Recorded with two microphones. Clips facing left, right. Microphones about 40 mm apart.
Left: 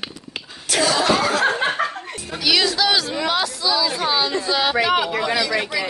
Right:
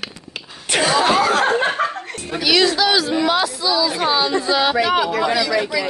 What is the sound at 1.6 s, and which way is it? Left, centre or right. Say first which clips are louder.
Chuckle: right 2 dB; centre.